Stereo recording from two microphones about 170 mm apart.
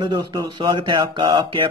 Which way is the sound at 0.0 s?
25° right (ahead or behind).